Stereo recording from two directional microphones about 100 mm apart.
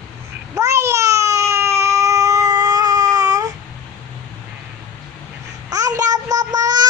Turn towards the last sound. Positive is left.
turn(degrees=-40)  # may be behind; listen again after turning